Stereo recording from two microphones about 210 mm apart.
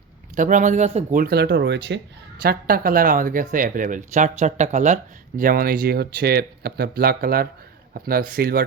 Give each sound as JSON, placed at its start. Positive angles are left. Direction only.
{"t": 0.3, "sound": "speech", "side_deg": -35}
{"t": 2.4, "sound": "speech", "side_deg": -45}